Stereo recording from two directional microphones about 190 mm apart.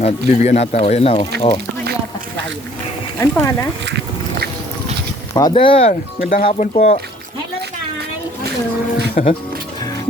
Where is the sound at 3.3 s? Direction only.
15° left (ahead or behind).